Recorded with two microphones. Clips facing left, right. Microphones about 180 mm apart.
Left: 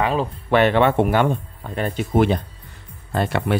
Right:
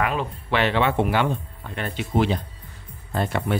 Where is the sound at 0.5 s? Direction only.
50° left (ahead or behind).